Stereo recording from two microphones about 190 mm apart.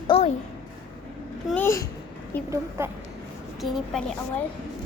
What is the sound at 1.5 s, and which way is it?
Speech, 10° left (ahead or behind).